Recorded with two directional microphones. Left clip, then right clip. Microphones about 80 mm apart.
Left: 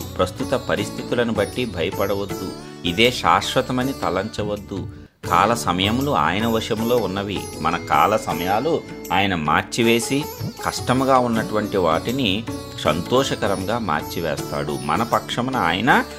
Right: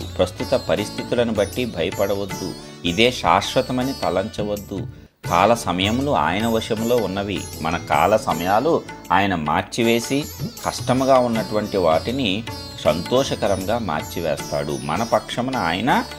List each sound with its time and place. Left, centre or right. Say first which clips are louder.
0.2 s speech: right 2 dB; centre
3.8 s speech: right 1 dB; centre
9.3 s speech: left 1 dB; left
10.6 s speech: even; centre
13.1 s speech: even; left
13.5 s speech: even; centre